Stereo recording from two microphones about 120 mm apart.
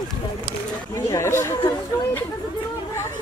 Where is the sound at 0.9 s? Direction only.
25° left (ahead or behind).